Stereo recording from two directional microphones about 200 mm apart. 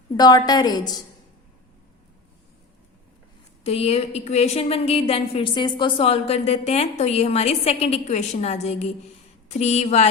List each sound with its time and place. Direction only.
0.2 s a woman's voice: 20° left (ahead or behind)
3.6 s a woman's voice: 30° left (ahead or behind)